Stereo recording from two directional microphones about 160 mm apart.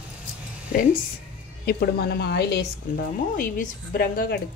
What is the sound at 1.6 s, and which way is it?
A woman's voice, 80° left.